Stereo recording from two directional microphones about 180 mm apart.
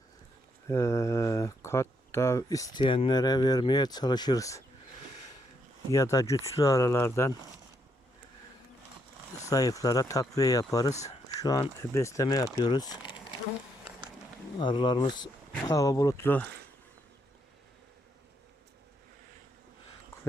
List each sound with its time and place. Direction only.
0.7 s speech: 15° left (ahead or behind)
5.9 s speech: 15° left (ahead or behind)
9.4 s speech: 20° left (ahead or behind)
14.6 s speech: 25° left (ahead or behind)